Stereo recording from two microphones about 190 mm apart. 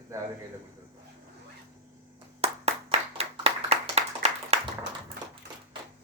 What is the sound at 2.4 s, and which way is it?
Clapping, 35° right (ahead or behind).